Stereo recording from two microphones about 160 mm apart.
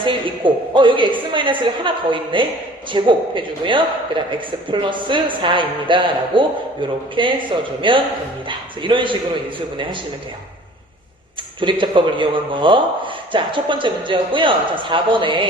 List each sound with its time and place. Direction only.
0.0 s a man's voice: 30° right (ahead or behind)
11.6 s a man's voice: 30° right (ahead or behind)